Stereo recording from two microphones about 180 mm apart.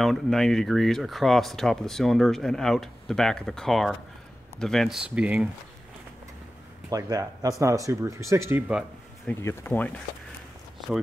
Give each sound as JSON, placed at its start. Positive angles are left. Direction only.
{"t": 0.0, "sound": "speech", "side_deg": 0}
{"t": 6.9, "sound": "speech", "side_deg": -20}
{"t": 9.3, "sound": "speech", "side_deg": 15}